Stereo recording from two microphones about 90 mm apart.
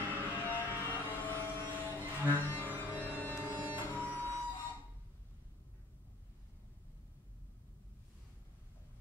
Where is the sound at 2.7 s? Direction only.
20° right (ahead or behind).